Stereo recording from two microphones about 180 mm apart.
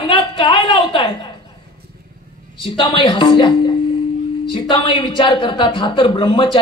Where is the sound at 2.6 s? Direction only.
30° left (ahead or behind).